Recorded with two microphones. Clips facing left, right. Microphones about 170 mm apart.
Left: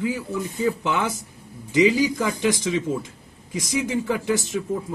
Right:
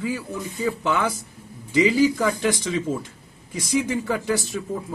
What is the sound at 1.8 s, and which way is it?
A man's voice, 15° left (ahead or behind).